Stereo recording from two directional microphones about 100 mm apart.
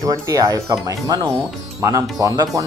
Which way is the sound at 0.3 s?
35° right (ahead or behind).